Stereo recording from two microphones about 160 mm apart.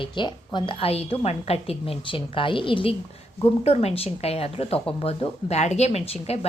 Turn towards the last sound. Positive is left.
turn(degrees=40)  # may be behind; listen again after turning